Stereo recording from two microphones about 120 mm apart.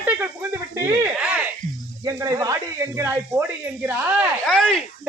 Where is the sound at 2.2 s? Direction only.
30° right (ahead or behind).